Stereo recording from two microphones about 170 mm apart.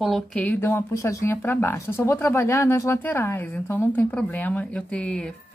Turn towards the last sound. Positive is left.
turn(degrees=5)  # may be behind; listen again after turning